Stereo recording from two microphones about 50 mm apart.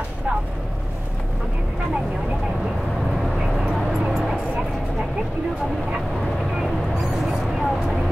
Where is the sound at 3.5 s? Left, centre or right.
Centre.